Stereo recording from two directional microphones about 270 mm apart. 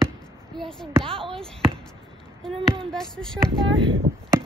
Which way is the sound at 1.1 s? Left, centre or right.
Centre.